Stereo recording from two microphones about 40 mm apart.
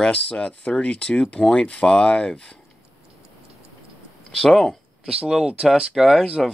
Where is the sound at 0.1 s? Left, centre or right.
Left.